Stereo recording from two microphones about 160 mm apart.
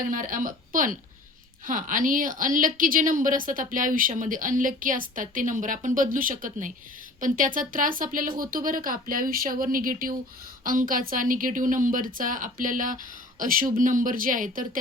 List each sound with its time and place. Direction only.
0.1 s a woman's voice: 55° right (ahead or behind)